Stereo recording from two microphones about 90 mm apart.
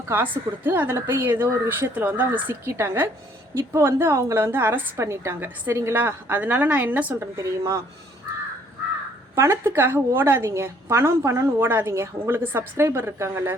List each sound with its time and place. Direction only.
0.1 s a woman's voice: 25° right (ahead or behind)
7.3 s speech: 35° right (ahead or behind)
9.3 s a woman's voice: 30° right (ahead or behind)